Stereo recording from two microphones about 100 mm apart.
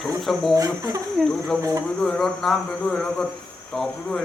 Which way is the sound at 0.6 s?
35° right (ahead or behind).